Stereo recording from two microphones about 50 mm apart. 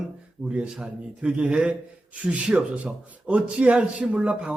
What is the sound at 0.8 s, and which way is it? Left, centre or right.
Speech, centre.